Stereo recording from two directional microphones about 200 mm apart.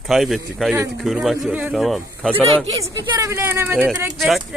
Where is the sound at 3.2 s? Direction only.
15° right (ahead or behind).